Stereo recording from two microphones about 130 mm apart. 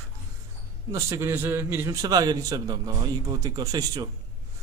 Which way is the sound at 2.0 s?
30° right (ahead or behind).